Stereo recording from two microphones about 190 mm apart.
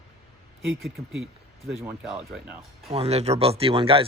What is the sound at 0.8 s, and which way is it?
Speech, centre (ahead or behind).